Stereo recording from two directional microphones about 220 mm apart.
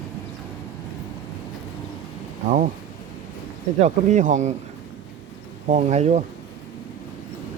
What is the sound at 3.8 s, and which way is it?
Speech, 35° right (ahead or behind).